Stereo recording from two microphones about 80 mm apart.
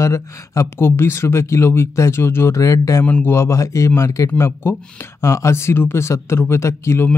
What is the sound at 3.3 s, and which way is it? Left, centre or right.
Speech, left.